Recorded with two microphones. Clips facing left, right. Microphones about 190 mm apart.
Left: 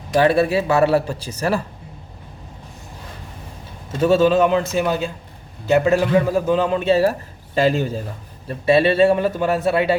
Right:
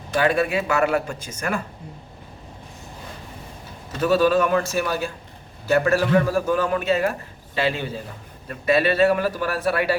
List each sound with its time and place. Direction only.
0.1 s a man's voice: 35° left (ahead or behind)
4.0 s a man's voice: 25° left (ahead or behind); by 8.0 s 45° left (ahead or behind)
8.4 s a man's voice: 30° left (ahead or behind)